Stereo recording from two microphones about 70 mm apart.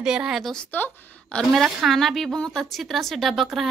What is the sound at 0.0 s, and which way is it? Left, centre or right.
Speech, centre.